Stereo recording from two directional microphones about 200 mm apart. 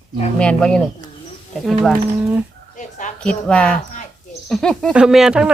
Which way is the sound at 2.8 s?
40° left (ahead or behind).